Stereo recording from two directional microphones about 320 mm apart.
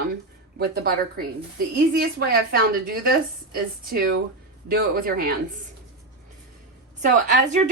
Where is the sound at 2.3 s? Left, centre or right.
Right.